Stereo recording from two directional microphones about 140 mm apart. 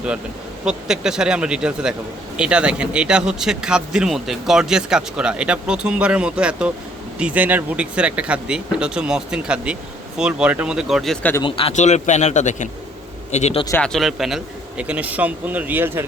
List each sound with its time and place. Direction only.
0.6 s speech: 5° right (ahead or behind)
11.4 s speech: 40° left (ahead or behind)
11.7 s a man's voice: 55° left (ahead or behind)
13.8 s speech: centre (ahead or behind)